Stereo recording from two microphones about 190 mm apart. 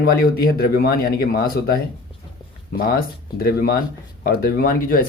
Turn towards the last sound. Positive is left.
turn(degrees=50)  # may be behind; listen again after turning